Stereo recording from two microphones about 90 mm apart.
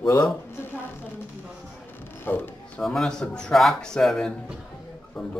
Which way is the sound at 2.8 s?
5° left (ahead or behind).